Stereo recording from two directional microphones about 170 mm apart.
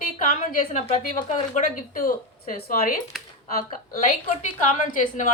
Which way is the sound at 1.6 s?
50° left (ahead or behind).